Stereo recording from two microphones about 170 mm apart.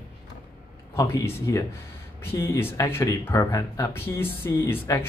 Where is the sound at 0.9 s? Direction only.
15° left (ahead or behind).